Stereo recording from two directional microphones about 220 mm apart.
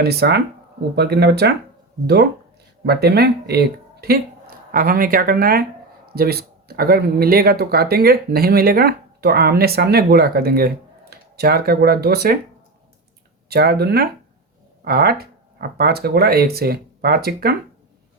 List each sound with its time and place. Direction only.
0.0 s speech: 45° right (ahead or behind)
2.8 s speech: 45° right (ahead or behind)
13.5 s speech: 45° right (ahead or behind)